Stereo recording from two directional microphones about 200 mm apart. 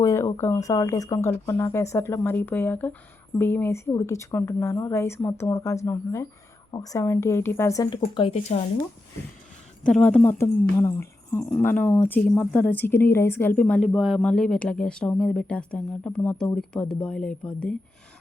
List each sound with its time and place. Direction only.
0.0 s speech: 15° left (ahead or behind)
8.0 s speech: 30° left (ahead or behind)
9.8 s speech: 5° left (ahead or behind)